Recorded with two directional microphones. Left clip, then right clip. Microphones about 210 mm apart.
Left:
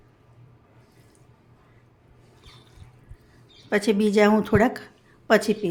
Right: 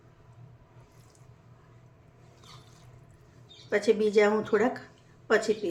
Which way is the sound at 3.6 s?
50° left (ahead or behind).